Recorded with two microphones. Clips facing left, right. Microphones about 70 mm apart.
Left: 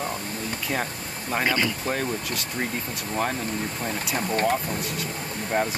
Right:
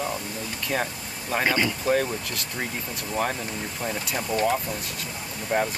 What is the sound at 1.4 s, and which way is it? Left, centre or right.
Speech, centre.